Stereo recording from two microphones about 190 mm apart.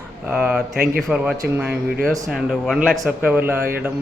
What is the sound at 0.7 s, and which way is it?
Speech, 50° right (ahead or behind).